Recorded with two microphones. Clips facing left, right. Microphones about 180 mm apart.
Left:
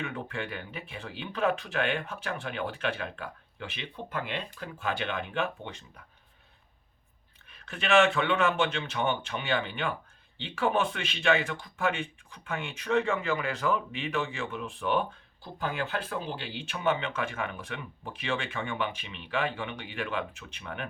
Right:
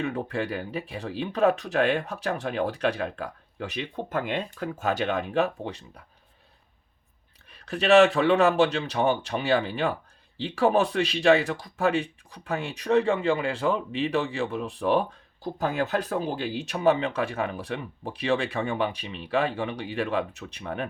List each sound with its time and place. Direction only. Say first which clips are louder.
0.0 s speech: right 7 dB; 35° right (ahead or behind)
7.5 s speech: right 6 dB; 35° right (ahead or behind)